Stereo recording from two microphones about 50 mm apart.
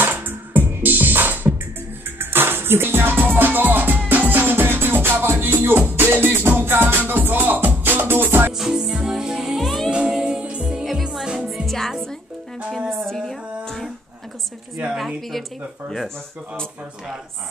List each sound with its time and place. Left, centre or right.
0.0 s music: right
8.5 s music: centre
10.9 s music: centre
12.9 s a sound: centre
15.0 s speech: centre